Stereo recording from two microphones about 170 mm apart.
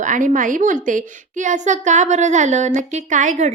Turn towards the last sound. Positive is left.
turn(degrees=-45)  # may be behind; listen again after turning